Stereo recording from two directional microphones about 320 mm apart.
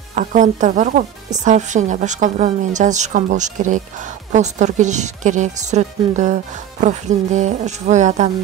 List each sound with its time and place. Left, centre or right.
0.1 s a woman's voice: right